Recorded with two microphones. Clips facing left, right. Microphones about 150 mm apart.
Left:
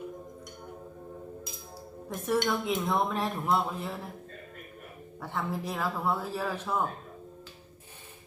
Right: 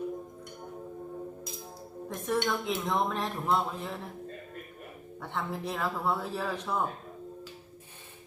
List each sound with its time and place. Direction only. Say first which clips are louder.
2.0 s speech: left 2 dB; 5° left (ahead or behind)
5.2 s speech: left 1 dB; centre (ahead or behind)